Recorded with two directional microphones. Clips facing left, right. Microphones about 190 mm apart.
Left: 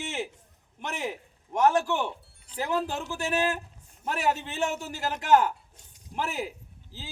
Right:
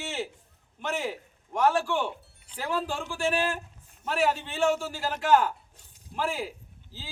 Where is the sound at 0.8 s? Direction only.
20° left (ahead or behind).